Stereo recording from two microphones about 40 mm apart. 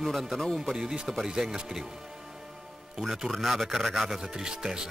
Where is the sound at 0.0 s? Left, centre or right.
Centre.